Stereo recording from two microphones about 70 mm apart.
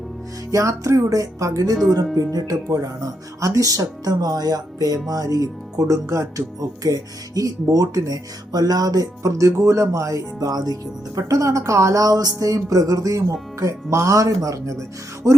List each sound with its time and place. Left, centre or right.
0.5 s speech: right
11.2 s speech: right